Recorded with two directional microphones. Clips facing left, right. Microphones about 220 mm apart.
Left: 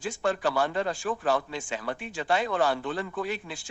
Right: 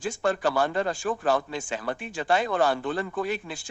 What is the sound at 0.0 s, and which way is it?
A man's voice, 45° right (ahead or behind).